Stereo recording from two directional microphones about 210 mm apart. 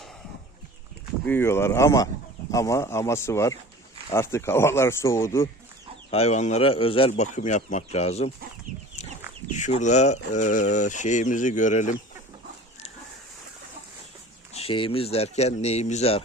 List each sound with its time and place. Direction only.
1.2 s speech: 10° left (ahead or behind)
6.1 s speech: 30° left (ahead or behind)
9.5 s speech: 35° left (ahead or behind)
14.5 s speech: 25° left (ahead or behind)